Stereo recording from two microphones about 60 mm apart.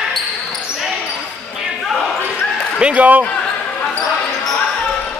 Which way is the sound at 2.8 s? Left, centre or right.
Right.